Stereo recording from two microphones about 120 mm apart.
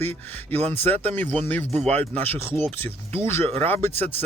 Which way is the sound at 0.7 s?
15° left (ahead or behind).